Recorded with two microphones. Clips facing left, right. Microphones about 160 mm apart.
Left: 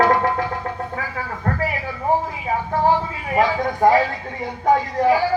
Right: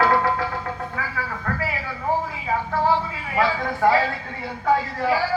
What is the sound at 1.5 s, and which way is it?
Speech, 35° left (ahead or behind).